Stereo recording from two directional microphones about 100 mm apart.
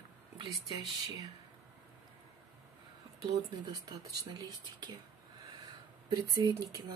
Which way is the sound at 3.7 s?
40° right (ahead or behind).